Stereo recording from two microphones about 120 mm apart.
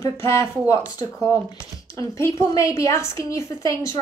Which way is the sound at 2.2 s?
25° left (ahead or behind).